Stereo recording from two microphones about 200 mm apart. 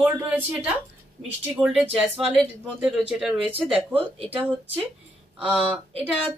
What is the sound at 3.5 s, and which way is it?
Speech, 30° right (ahead or behind).